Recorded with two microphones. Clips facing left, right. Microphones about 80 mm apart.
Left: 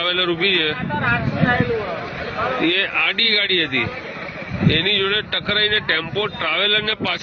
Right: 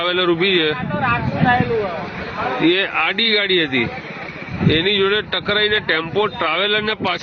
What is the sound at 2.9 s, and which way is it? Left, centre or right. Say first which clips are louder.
Speech: right 3 dB; centre.